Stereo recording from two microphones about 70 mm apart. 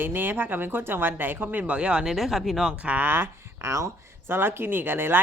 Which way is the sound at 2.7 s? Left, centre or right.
Right.